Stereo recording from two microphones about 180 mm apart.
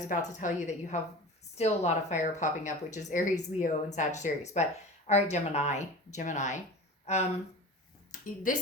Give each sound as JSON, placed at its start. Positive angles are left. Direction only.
{"t": 0.1, "sound": "a woman's voice", "side_deg": 45}